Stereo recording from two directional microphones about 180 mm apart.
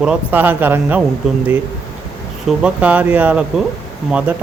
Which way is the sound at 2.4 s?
5° right (ahead or behind).